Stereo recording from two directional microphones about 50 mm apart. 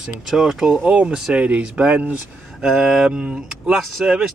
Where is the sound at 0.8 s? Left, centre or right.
Right.